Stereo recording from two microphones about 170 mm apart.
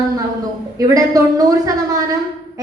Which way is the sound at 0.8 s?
20° right (ahead or behind).